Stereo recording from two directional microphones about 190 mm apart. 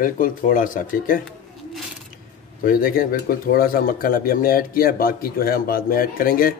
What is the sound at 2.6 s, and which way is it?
Speech, 50° left (ahead or behind).